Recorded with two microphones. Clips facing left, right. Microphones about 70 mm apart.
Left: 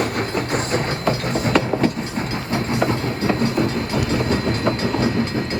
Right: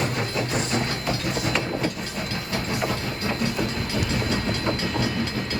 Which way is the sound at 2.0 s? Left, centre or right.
Left.